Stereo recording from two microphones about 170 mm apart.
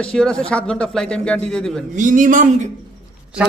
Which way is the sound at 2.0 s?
50° right (ahead or behind).